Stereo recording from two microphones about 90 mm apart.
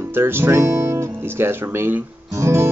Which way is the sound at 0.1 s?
25° right (ahead or behind).